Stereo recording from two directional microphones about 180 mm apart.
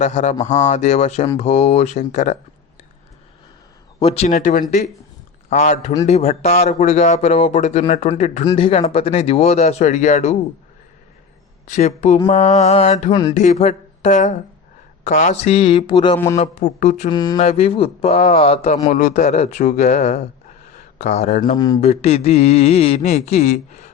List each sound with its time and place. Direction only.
0.0 s speech: 45° left (ahead or behind)
0.4 s mantra: 40° left (ahead or behind)
4.0 s mantra: 35° left (ahead or behind)
11.6 s mantra: 40° left (ahead or behind)
13.3 s speech: 40° left (ahead or behind)
15.0 s mantra: 45° left (ahead or behind); by 16.1 s 25° left (ahead or behind)
16.1 s speech: 15° left (ahead or behind)
16.4 s mantra: 40° left (ahead or behind)
17.1 s a sound: 25° left (ahead or behind)
17.3 s mantra: 35° left (ahead or behind)
18.9 s mantra: 50° left (ahead or behind)
20.7 s speech: 40° left (ahead or behind)
21.5 s a sound: 20° left (ahead or behind)
21.8 s mantra: 35° left (ahead or behind)